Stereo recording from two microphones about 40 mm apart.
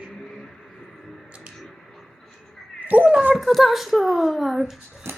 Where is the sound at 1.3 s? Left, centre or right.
Right.